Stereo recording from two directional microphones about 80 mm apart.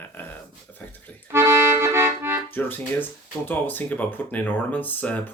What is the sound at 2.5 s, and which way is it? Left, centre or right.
Speech, left.